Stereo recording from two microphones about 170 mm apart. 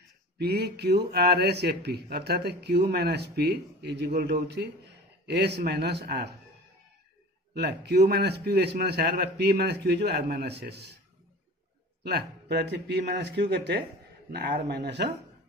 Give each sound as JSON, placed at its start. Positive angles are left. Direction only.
{"t": 0.4, "sound": "speech", "side_deg": -75}
{"t": 7.5, "sound": "speech", "side_deg": -75}
{"t": 12.0, "sound": "speech", "side_deg": -75}
{"t": 14.3, "sound": "speech", "side_deg": -70}